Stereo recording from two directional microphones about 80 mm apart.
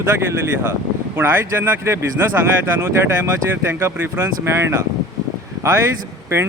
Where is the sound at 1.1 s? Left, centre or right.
Right.